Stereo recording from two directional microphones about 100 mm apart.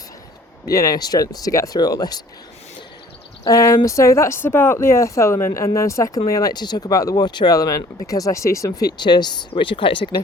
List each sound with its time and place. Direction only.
0.7 s speech: 35° left (ahead or behind)
3.4 s speech: 30° left (ahead or behind)
9.6 s speech: 60° left (ahead or behind)